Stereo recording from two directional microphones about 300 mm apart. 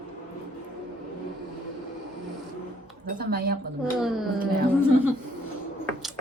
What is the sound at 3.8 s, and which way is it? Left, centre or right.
Speech, centre.